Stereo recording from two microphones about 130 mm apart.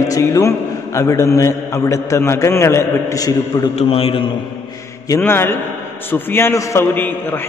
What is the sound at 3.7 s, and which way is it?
Speech, 50° left (ahead or behind).